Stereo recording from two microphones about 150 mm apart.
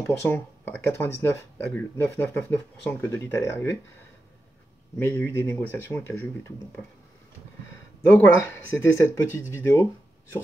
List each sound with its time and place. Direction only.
0.0 s speech: 10° left (ahead or behind)
4.9 s speech: 10° left (ahead or behind)
8.1 s speech: 15° left (ahead or behind)